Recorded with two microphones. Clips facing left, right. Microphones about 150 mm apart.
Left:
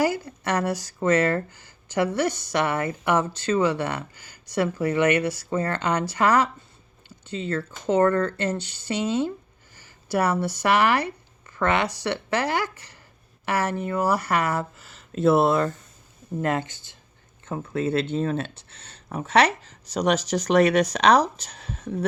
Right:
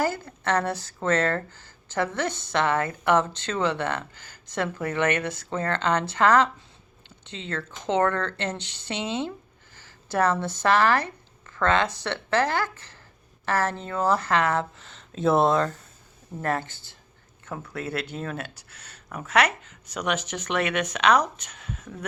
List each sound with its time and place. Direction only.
0.0 s speech: 15° left (ahead or behind)
16.4 s speech: 15° left (ahead or behind); by 22.0 s 35° left (ahead or behind)